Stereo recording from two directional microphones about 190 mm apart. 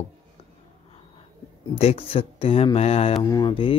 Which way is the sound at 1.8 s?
30° left (ahead or behind).